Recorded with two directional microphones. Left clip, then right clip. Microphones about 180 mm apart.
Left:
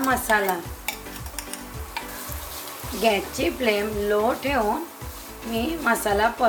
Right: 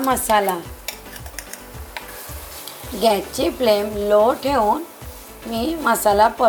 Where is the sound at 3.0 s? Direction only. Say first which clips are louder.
Right 4 dB; 25° right (ahead or behind).